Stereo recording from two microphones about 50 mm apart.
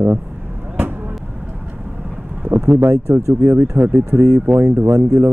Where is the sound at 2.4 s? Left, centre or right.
Right.